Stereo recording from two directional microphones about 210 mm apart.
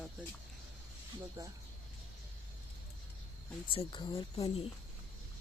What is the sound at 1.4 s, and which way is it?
Speech, 15° right (ahead or behind).